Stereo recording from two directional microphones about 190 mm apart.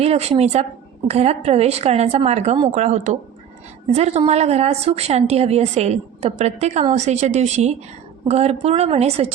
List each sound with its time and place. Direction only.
0.0 s a woman's voice: 35° right (ahead or behind)